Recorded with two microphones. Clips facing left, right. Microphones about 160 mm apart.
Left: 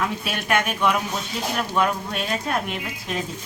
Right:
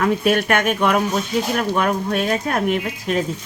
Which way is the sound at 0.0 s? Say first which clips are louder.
Right 10 dB; 55° right (ahead or behind).